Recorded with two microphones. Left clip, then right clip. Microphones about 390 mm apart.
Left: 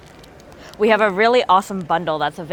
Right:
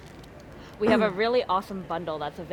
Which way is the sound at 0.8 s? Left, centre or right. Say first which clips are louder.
Left 8 dB; left.